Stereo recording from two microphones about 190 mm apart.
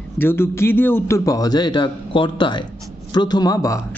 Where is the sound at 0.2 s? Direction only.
10° left (ahead or behind).